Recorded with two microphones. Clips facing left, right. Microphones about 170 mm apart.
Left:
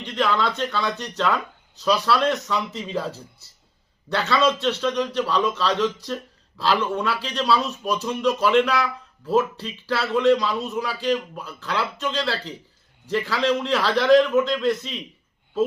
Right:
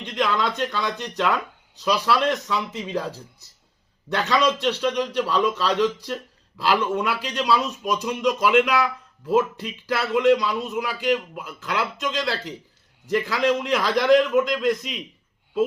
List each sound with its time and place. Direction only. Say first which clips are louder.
0.0 s a man's voice: left 1 dB; 15° right (ahead or behind)